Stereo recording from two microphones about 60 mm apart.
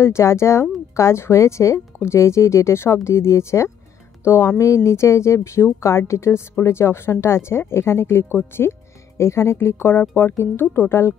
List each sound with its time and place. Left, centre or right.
0.0 s a woman's voice: left
4.6 s a woman's voice: left